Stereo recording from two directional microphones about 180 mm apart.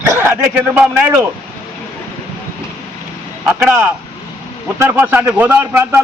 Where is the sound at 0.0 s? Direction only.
10° right (ahead or behind).